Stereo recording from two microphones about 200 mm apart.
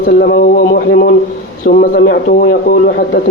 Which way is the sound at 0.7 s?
60° left (ahead or behind).